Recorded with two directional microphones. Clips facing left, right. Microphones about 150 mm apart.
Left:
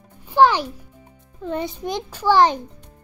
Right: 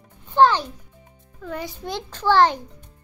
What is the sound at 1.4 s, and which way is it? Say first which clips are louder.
A child's voice: left 5 dB; 25° left (ahead or behind).